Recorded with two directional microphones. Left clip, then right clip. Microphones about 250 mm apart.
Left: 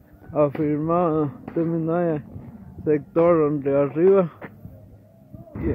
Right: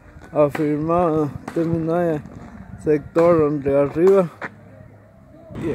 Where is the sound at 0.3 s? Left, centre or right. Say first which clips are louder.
Right 3 dB; centre.